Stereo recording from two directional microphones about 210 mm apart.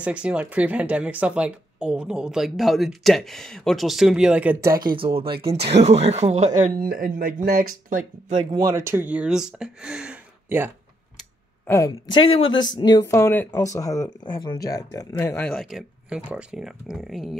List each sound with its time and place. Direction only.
0.0 s speech: 5° right (ahead or behind)
4.9 s speech: 25° right (ahead or behind)
8.6 s speech: 15° right (ahead or behind)
11.6 s a woman's voice: 10° left (ahead or behind)